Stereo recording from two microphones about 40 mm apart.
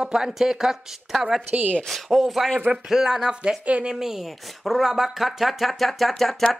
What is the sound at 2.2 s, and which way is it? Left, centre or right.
Speech, centre.